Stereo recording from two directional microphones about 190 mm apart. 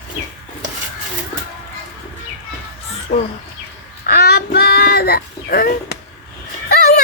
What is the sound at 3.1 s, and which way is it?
Speech, 40° left (ahead or behind).